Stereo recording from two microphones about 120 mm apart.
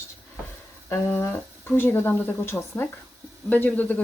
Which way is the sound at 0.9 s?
20° left (ahead or behind).